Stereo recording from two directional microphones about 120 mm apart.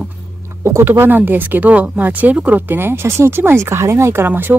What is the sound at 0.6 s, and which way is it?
Speech, 20° right (ahead or behind).